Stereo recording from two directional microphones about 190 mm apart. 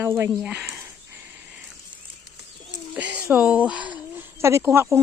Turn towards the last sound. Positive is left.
turn(degrees=-15)  # may be behind; listen again after turning